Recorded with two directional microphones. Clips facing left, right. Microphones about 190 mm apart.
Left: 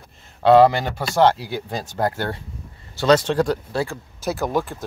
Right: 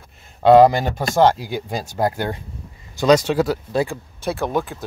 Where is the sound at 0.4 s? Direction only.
15° right (ahead or behind).